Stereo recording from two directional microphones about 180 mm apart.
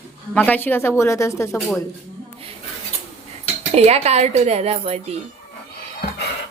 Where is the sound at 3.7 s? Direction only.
35° right (ahead or behind).